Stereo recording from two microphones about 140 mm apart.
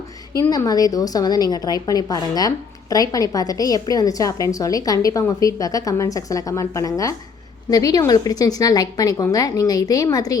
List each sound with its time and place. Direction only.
0.5 s a woman's voice: 25° left (ahead or behind)